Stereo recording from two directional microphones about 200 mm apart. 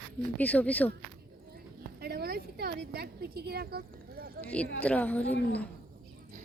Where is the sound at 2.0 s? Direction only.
50° right (ahead or behind).